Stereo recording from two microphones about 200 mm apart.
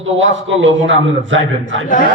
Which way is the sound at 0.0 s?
70° right (ahead or behind).